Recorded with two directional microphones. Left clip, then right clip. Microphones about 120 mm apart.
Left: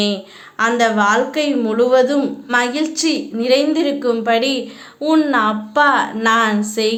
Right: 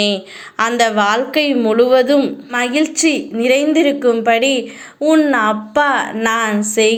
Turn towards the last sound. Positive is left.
turn(degrees=-25)  # may be behind; listen again after turning